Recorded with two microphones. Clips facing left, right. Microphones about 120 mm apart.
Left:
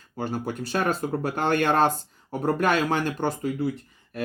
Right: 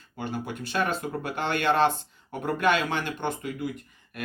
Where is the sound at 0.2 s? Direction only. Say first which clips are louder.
Left 4 dB; 40° left (ahead or behind).